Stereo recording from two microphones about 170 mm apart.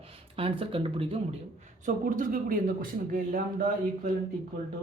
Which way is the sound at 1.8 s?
50° right (ahead or behind).